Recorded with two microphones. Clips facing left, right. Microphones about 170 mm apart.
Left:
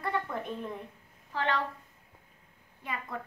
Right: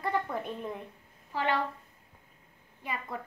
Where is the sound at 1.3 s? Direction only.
10° right (ahead or behind).